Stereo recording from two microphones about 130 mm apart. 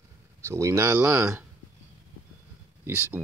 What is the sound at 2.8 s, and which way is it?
Speech, 15° right (ahead or behind).